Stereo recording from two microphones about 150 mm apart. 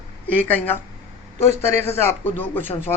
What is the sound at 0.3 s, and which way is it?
Speech, 10° left (ahead or behind).